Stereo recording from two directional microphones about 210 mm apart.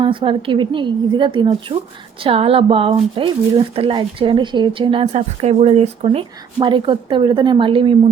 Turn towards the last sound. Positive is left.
turn(degrees=-25)  # may be behind; listen again after turning